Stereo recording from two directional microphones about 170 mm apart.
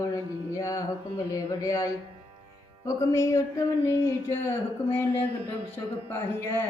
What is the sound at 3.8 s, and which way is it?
Speech, 15° left (ahead or behind).